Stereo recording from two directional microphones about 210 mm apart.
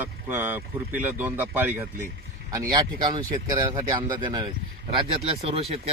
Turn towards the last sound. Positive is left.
turn(degrees=-30)  # may be behind; listen again after turning